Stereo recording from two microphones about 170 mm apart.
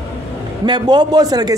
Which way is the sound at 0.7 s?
25° right (ahead or behind).